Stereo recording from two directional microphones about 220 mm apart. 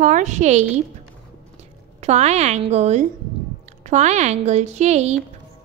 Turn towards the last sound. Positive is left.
turn(degrees=-30)  # may be behind; listen again after turning